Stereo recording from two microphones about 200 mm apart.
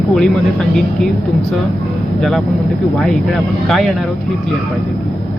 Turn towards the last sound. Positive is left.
turn(degrees=0)  # may be behind; listen again after turning